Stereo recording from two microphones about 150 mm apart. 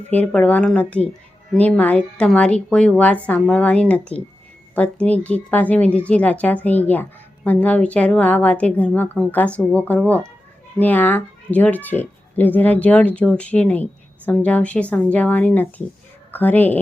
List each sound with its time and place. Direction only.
0.1 s a woman's voice: 10° left (ahead or behind)